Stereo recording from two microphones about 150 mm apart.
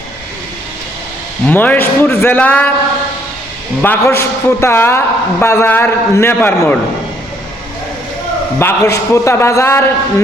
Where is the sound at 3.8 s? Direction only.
15° left (ahead or behind).